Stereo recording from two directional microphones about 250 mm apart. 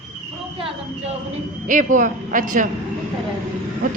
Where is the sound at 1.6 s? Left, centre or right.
Right.